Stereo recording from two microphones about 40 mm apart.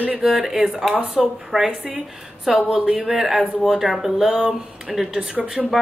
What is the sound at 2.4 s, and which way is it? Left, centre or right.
Speech, centre.